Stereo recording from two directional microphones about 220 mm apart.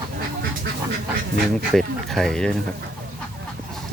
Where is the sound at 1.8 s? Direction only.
Centre (ahead or behind).